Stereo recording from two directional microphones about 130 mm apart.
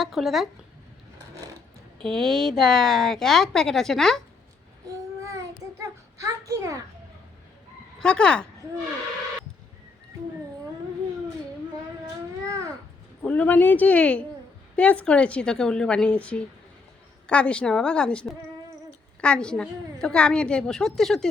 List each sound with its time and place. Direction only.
0.0 s speech: centre (ahead or behind)
2.0 s speech: 5° left (ahead or behind)
5.2 s a sound: 25° right (ahead or behind)
7.9 s a woman's voice: 5° left (ahead or behind)
12.5 s babbling: 25° right (ahead or behind)
13.2 s a woman's voice: 10° left (ahead or behind)